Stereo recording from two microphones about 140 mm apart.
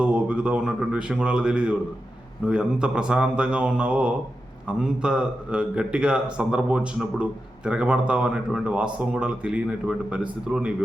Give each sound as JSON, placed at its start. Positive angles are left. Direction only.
{"t": 0.0, "sound": "a man's voice", "side_deg": -10}